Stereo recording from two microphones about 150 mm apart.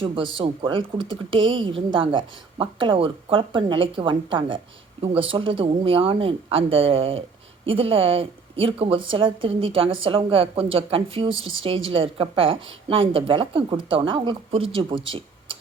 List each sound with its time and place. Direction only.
0.0 s a woman's voice: 35° right (ahead or behind)